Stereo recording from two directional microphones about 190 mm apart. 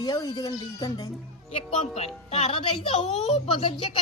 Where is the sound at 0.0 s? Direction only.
20° left (ahead or behind).